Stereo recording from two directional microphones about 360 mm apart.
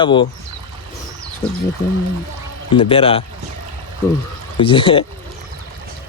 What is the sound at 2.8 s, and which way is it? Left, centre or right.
Speech, centre.